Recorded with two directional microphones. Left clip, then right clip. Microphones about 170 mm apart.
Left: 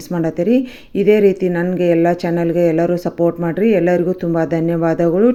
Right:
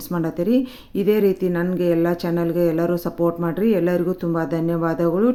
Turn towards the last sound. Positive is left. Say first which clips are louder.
# left 6 dB
turn(degrees=15)  # may be behind; listen again after turning